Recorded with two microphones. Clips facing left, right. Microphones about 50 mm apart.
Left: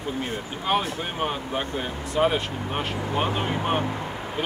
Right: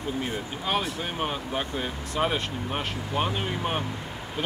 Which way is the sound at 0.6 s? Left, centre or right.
Centre.